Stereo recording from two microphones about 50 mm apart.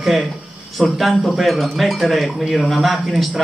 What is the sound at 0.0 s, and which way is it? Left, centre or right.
Speech, centre.